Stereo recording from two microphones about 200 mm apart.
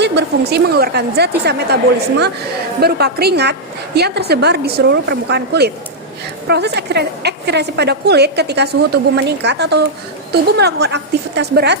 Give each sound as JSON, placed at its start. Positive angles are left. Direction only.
{"t": 0.0, "sound": "a woman's voice", "side_deg": -55}